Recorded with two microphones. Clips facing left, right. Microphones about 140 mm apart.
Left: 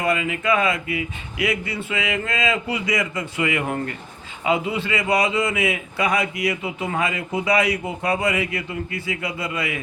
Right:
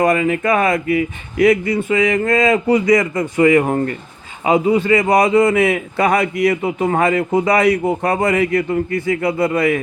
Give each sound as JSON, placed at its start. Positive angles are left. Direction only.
{"t": 0.0, "sound": "a man's voice", "side_deg": -45}